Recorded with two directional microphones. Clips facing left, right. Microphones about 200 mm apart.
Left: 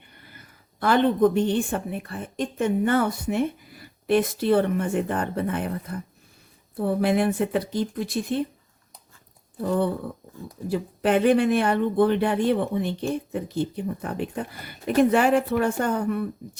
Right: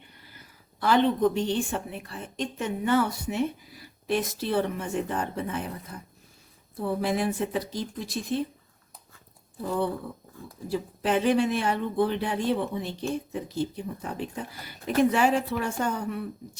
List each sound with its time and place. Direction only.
0.2 s speech: 55° left (ahead or behind)
7.0 s speech: 60° left (ahead or behind)
10.7 s speech: 60° left (ahead or behind)